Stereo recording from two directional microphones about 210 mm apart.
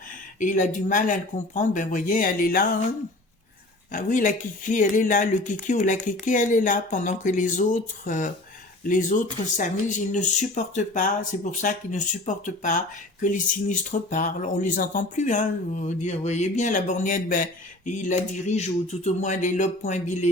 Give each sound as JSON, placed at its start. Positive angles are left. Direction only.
{"t": 0.1, "sound": "speech", "side_deg": 40}
{"t": 3.9, "sound": "speech", "side_deg": 40}